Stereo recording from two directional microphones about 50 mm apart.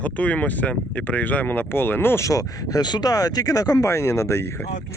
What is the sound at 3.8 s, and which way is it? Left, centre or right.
Speech, left.